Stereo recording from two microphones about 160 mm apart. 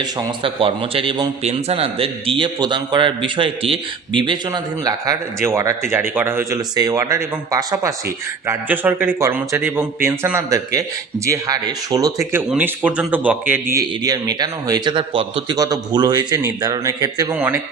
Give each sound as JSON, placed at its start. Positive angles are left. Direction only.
{"t": 0.0, "sound": "a man's voice", "side_deg": -30}
{"t": 15.5, "sound": "a man's voice", "side_deg": -25}